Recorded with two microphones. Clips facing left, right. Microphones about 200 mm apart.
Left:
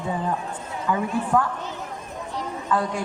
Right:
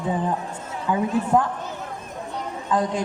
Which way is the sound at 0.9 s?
20° right (ahead or behind).